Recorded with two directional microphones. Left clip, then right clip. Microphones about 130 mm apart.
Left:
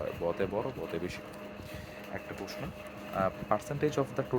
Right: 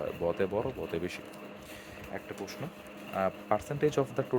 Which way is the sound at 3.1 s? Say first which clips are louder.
Right 1 dB; 15° right (ahead or behind).